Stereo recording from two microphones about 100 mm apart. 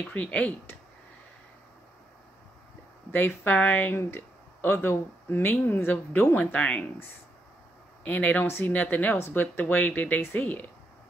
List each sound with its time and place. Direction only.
0.1 s speech: 15° left (ahead or behind)
3.1 s speech: 20° left (ahead or behind)